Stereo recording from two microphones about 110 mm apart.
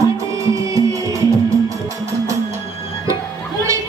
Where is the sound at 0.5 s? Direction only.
30° right (ahead or behind).